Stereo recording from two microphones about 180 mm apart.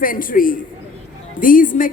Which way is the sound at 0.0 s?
50° left (ahead or behind).